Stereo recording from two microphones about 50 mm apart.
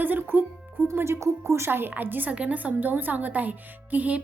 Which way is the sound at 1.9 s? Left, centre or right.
Right.